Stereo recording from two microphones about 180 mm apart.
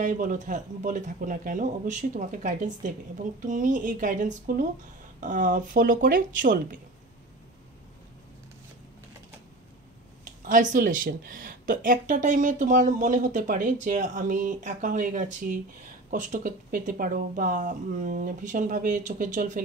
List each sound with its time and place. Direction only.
0.0 s speech: 45° right (ahead or behind)
10.2 s speech: 45° right (ahead or behind)